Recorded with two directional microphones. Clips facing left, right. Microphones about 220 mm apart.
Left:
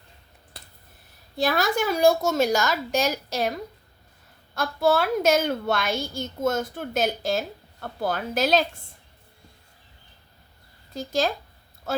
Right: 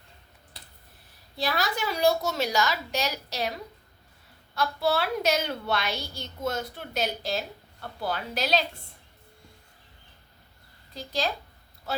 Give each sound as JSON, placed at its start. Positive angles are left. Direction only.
{"t": 1.4, "sound": "a woman's voice", "side_deg": 50}
{"t": 10.9, "sound": "a woman's voice", "side_deg": 45}